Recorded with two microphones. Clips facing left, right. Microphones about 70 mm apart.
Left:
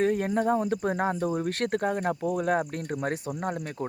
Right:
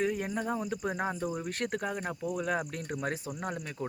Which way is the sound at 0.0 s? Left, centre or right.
Left.